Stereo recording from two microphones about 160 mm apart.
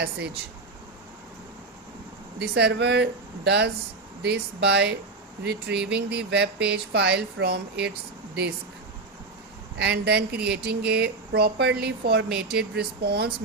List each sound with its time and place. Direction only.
2.4 s speech: 90° right
9.7 s speech: 90° right